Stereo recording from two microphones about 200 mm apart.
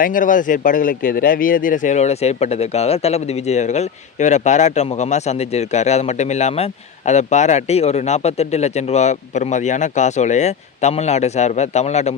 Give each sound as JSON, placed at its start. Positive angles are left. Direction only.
{"t": 0.0, "sound": "speech", "side_deg": 40}